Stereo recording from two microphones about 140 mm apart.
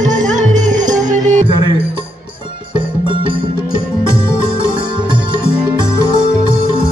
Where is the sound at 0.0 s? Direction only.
60° right (ahead or behind).